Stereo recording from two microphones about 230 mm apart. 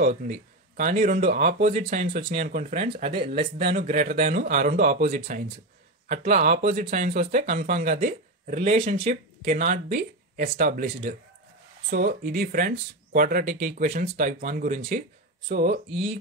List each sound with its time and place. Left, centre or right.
0.0 s speech: right